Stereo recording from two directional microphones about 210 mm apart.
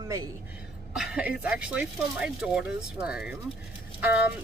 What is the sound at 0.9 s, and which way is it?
Speech, 5° right (ahead or behind).